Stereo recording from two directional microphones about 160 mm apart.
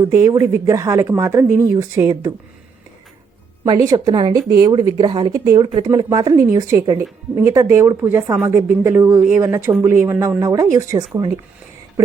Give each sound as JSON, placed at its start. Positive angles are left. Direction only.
{"t": 0.0, "sound": "a woman's voice", "side_deg": -20}
{"t": 3.7, "sound": "a woman's voice", "side_deg": -25}